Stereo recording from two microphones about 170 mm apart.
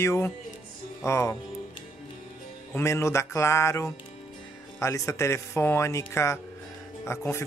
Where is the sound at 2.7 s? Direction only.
15° left (ahead or behind).